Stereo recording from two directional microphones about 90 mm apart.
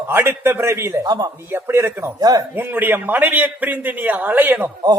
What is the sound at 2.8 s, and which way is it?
A man's voice, 20° right (ahead or behind).